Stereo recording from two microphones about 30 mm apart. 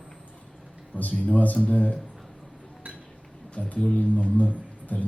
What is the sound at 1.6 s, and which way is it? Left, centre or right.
Speech, left.